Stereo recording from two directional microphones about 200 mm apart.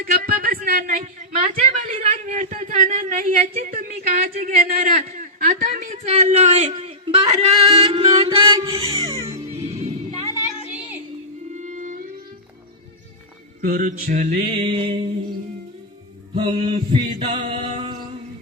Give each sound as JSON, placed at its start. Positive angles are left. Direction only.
{"t": 0.0, "sound": "a sound", "side_deg": -45}
{"t": 8.5, "sound": "music", "side_deg": -25}
{"t": 11.5, "sound": "music", "side_deg": -40}
{"t": 13.6, "sound": "mantra", "side_deg": -45}
{"t": 16.3, "sound": "mantra", "side_deg": -30}
{"t": 17.1, "sound": "a sound", "side_deg": -30}